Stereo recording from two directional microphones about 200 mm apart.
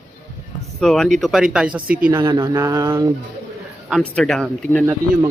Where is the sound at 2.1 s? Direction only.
20° right (ahead or behind).